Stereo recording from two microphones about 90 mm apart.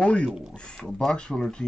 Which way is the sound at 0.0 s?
10° left (ahead or behind).